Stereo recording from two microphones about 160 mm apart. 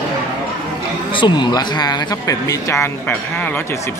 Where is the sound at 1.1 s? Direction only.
30° left (ahead or behind); by 3.6 s 10° left (ahead or behind).